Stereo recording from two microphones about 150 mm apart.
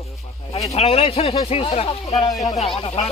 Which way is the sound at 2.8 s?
40° left (ahead or behind).